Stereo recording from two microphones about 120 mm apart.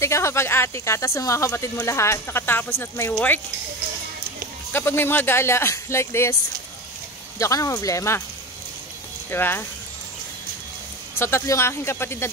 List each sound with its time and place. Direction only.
0.0 s speech: 25° left (ahead or behind)
4.7 s speech: 15° left (ahead or behind)
7.3 s speech: 25° left (ahead or behind)
9.3 s speech: 20° left (ahead or behind)
11.1 s speech: 20° left (ahead or behind)